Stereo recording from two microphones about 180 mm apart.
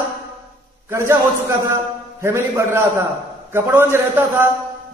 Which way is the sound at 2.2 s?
15° right (ahead or behind).